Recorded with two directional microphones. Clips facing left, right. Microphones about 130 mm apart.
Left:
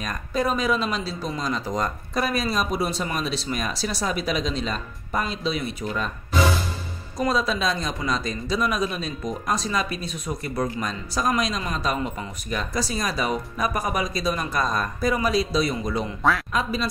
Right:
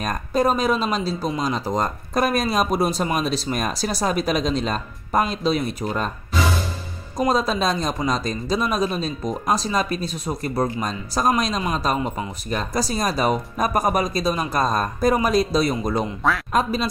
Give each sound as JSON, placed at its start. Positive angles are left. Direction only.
{"t": 0.0, "sound": "speech", "side_deg": -40}
{"t": 2.5, "sound": "speech", "side_deg": -45}
{"t": 7.2, "sound": "speech", "side_deg": -40}
{"t": 16.2, "sound": "speech", "side_deg": 0}